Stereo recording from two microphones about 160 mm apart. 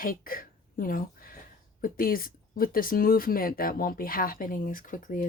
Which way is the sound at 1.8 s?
65° left (ahead or behind).